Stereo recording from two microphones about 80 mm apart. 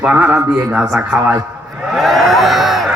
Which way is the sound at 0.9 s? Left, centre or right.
Centre.